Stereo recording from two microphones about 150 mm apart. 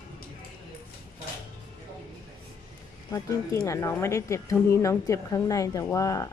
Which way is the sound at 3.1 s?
20° left (ahead or behind).